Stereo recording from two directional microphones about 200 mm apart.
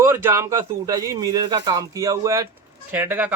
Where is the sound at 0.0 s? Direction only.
15° right (ahead or behind).